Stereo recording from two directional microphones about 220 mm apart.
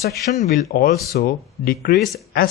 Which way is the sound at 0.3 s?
40° left (ahead or behind).